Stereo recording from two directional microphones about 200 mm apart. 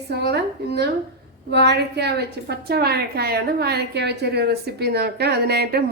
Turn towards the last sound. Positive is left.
turn(degrees=-50)  # may be behind; listen again after turning